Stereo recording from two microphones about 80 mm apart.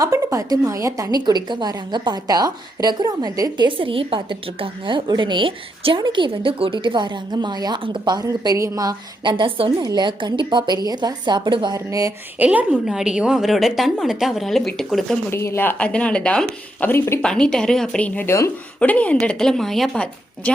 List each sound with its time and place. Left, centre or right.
0.0 s a woman's voice: right
1.2 s a woman's voice: right
3.6 s a woman's voice: right
4.9 s a woman's voice: right
8.5 s a woman's voice: right
9.2 s a woman's voice: right
9.8 s a woman's voice: right
11.9 s a woman's voice: right
12.4 s a woman's voice: centre
12.8 s a woman's voice: centre
15.3 s speech: left
15.8 s a woman's voice: centre
18.3 s speech: left
18.8 s a woman's voice: centre